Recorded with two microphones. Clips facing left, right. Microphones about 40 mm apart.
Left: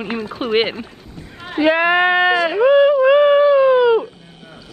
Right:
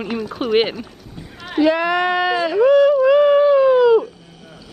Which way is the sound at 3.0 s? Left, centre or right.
Left.